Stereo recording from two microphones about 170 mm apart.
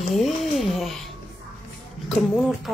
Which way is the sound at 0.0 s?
Centre (ahead or behind).